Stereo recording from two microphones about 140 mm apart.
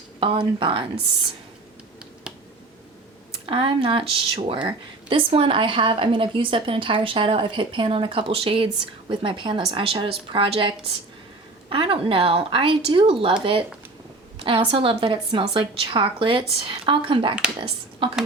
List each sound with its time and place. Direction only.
0.2 s speech: 40° right (ahead or behind)
3.4 s speech: 40° right (ahead or behind)
11.7 s speech: 40° right (ahead or behind)